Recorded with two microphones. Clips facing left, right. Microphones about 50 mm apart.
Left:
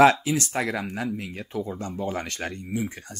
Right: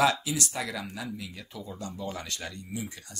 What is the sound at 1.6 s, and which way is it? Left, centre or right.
Speech, left.